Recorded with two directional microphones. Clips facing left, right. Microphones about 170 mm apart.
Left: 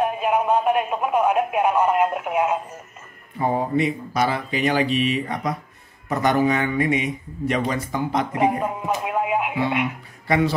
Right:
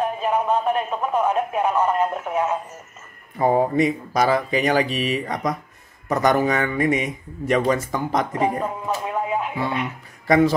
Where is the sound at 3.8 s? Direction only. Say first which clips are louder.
Right 2 dB; 40° right (ahead or behind).